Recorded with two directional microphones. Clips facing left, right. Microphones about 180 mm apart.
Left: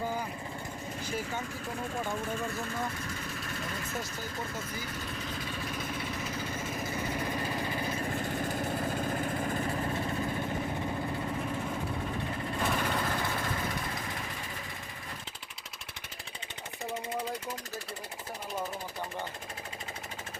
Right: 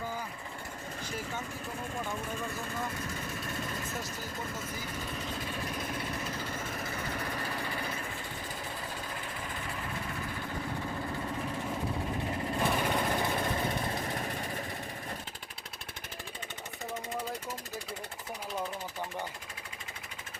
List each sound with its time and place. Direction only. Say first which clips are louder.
7.1 s engine: left 3 dB; 20° left (ahead or behind)
8.0 s vehicle: left 8 dB; 45° left (ahead or behind)
12.5 s engine: right 1 dB; 10° right (ahead or behind); by 14.4 s 35° right (ahead or behind)